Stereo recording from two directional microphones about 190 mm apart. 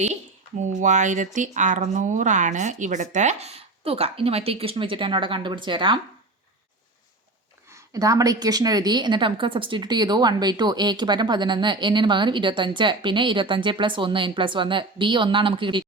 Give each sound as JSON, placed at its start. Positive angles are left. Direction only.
{"t": 0.7, "sound": "speech", "side_deg": -40}
{"t": 7.7, "sound": "a woman's voice", "side_deg": -15}